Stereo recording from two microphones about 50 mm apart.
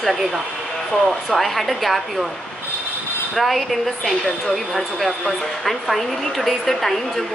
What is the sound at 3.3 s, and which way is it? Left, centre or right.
A woman's voice, centre.